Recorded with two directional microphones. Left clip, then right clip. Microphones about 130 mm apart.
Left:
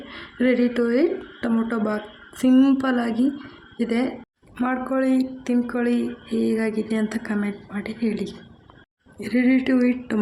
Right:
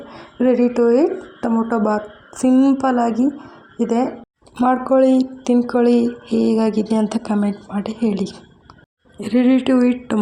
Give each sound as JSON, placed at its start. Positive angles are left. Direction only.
{"t": 0.1, "sound": "a sound", "side_deg": 10}
{"t": 0.7, "sound": "a woman's voice", "side_deg": 10}
{"t": 4.5, "sound": "speech", "side_deg": -25}
{"t": 9.2, "sound": "speech", "side_deg": -15}